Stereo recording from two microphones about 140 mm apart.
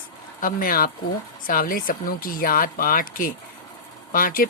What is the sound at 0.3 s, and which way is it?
Speech, 85° left.